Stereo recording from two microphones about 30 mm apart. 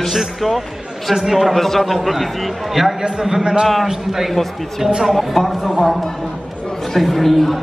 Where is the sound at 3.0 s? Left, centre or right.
Right.